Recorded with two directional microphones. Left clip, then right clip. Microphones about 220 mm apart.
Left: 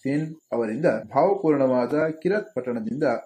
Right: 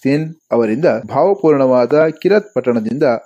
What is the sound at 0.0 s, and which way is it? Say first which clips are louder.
Speech: right 10 dB; 40° right (ahead or behind).